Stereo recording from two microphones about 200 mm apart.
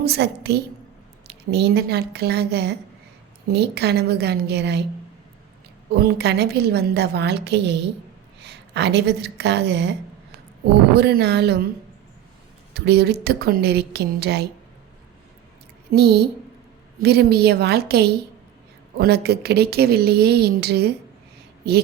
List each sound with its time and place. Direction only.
0.0 s a woman's voice: 55° right (ahead or behind)
5.9 s a woman's voice: 55° right (ahead or behind)
10.9 s a woman's voice: 55° right (ahead or behind)
12.7 s a woman's voice: 55° right (ahead or behind)
15.9 s a woman's voice: 55° right (ahead or behind)